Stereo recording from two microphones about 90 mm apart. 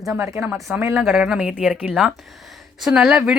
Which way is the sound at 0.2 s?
25° right (ahead or behind).